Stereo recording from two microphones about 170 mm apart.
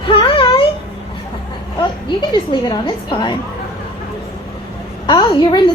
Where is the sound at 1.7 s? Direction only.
25° left (ahead or behind).